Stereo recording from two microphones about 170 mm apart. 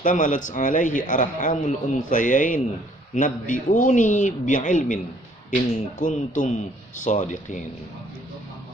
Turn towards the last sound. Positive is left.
turn(degrees=45)  # may be behind; listen again after turning